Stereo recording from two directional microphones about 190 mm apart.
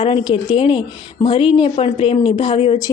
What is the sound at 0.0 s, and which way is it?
A woman's voice, 25° left (ahead or behind).